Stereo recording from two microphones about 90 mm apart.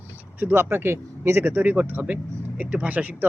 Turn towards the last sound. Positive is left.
turn(degrees=-20)  # may be behind; listen again after turning